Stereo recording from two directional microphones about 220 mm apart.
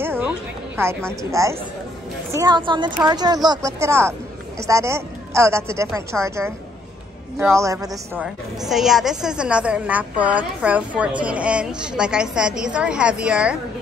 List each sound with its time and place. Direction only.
0.0 s music: 10° right (ahead or behind)
0.7 s a woman's voice: 10° right (ahead or behind)
8.2 s a woman's voice: centre (ahead or behind)